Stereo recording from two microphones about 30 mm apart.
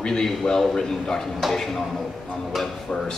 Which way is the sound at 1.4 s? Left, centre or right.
Centre.